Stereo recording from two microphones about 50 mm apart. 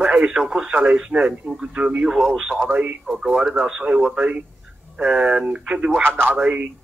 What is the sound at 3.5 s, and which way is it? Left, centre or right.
Speech, right.